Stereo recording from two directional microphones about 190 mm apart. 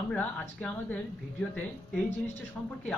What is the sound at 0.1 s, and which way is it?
Speech, 10° left (ahead or behind).